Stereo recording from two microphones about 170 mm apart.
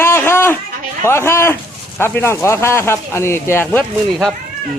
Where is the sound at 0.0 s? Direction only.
15° left (ahead or behind).